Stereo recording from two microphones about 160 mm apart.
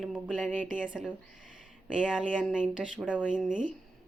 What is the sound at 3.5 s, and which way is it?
Speech, 55° right (ahead or behind).